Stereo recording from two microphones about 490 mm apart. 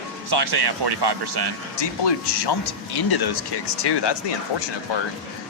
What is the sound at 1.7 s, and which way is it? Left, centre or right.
Speech, left.